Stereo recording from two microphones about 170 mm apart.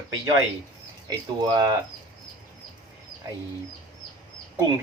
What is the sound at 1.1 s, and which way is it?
Speech, 20° right (ahead or behind).